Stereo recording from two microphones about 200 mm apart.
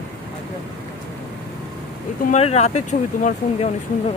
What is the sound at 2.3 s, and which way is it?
Speech, 30° left (ahead or behind).